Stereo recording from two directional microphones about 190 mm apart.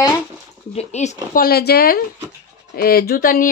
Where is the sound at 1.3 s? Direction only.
55° left (ahead or behind).